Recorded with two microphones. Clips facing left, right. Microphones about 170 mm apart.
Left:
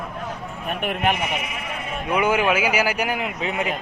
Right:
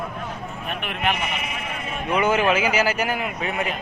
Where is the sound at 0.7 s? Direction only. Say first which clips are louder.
Left 4 dB; 45° left (ahead or behind).